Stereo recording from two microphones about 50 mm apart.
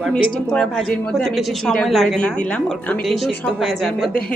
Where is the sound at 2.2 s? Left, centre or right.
Left.